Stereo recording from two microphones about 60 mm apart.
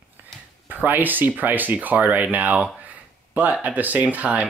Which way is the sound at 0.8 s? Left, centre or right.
Right.